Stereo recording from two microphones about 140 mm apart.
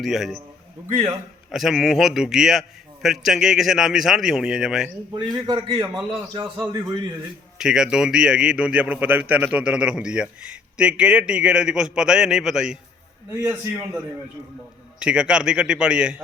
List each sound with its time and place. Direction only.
0.0 s a man's voice: centre (ahead or behind)
1.5 s a man's voice: centre (ahead or behind)
5.1 s a man's voice: 30° right (ahead or behind)
6.1 s a man's voice: 20° right (ahead or behind)
6.7 s a man's voice: 30° right (ahead or behind)
7.6 s a man's voice: 5° right (ahead or behind)
13.4 s a man's voice: 15° right (ahead or behind)
14.9 s a man's voice: 5° right (ahead or behind)